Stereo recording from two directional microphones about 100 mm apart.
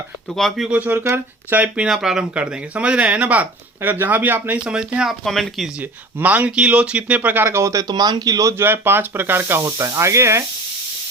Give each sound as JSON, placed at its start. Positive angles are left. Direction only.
{"t": 0.3, "sound": "speech", "side_deg": 0}
{"t": 0.8, "sound": "speech", "side_deg": -20}
{"t": 5.2, "sound": "speech", "side_deg": 5}
{"t": 5.8, "sound": "speech", "side_deg": -15}
{"t": 8.6, "sound": "speech", "side_deg": -20}